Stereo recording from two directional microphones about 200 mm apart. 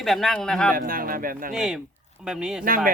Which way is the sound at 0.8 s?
45° right (ahead or behind).